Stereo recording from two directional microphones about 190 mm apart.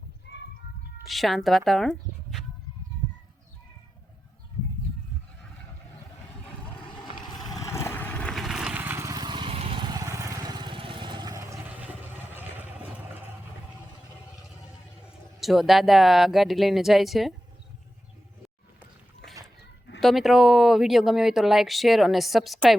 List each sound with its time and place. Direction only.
0.3 s children playing: 65° left (ahead or behind)
1.0 s speech: centre (ahead or behind)
7.2 s vehicle: centre (ahead or behind)
7.6 s vehicle: 15° left (ahead or behind); by 12.6 s 10° right (ahead or behind)
15.4 s speech: centre (ahead or behind)
18.8 s a sound: centre (ahead or behind)
20.0 s speech: centre (ahead or behind)